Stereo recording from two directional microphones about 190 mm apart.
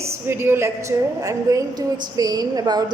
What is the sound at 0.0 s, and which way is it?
A woman's voice, 10° right (ahead or behind).